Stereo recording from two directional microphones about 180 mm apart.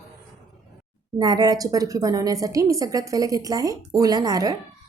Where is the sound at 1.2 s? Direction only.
20° right (ahead or behind).